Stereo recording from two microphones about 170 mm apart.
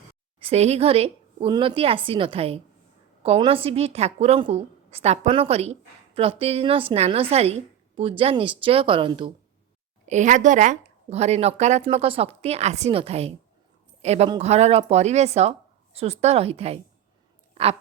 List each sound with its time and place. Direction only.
0.3 s a woman's voice: 35° right (ahead or behind)
10.1 s speech: 45° right (ahead or behind)
17.5 s a sound: 35° right (ahead or behind)